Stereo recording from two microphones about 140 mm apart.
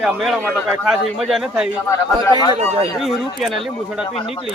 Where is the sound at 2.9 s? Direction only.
Centre (ahead or behind).